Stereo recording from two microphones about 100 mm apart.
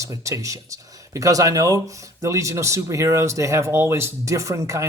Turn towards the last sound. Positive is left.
turn(degrees=-30)  # may be behind; listen again after turning